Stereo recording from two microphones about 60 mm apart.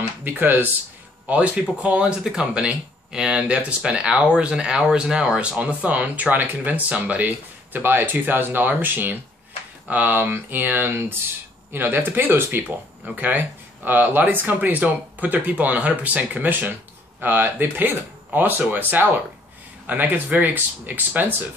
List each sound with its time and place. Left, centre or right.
0.2 s speech: right
1.2 s speech: right